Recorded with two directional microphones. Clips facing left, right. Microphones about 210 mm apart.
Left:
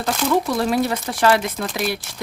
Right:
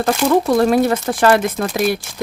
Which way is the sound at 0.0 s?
50° right (ahead or behind).